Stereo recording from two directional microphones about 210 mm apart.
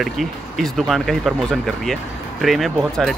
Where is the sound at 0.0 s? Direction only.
Centre (ahead or behind).